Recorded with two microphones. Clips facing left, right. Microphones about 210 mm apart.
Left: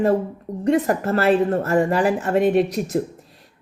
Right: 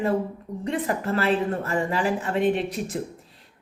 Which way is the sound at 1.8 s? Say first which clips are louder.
Left 5 dB; 60° left (ahead or behind).